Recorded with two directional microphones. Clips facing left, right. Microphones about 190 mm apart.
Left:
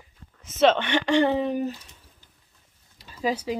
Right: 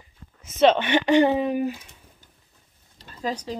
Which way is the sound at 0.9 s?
15° right (ahead or behind).